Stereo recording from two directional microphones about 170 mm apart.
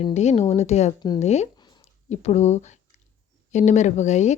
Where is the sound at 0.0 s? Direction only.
40° left (ahead or behind).